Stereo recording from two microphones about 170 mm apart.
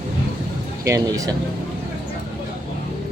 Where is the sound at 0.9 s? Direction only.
20° right (ahead or behind).